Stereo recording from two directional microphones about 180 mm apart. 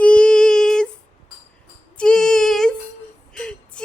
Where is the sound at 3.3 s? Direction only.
5° left (ahead or behind).